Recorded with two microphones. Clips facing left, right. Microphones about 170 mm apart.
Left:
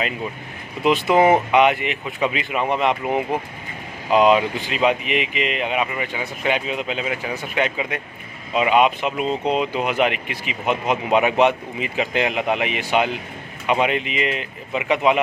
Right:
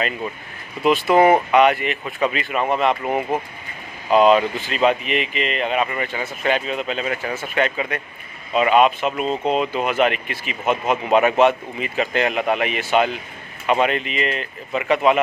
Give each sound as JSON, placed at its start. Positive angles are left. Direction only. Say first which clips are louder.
{"t": 0.8, "sound": "speech", "louder": "right 1 dB", "side_deg": 20}